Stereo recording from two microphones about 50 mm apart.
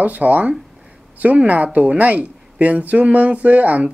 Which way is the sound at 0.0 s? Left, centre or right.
Right.